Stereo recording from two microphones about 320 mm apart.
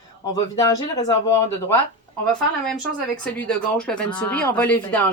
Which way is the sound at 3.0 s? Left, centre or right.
Centre.